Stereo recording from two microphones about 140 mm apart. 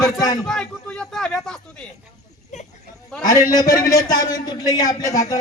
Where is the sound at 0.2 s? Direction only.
30° left (ahead or behind).